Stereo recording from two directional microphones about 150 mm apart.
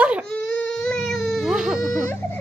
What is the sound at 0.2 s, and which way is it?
Baby cry, 5° left (ahead or behind).